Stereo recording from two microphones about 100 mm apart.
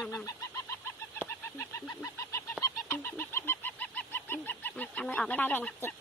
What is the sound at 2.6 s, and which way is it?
Fowl, 25° left (ahead or behind).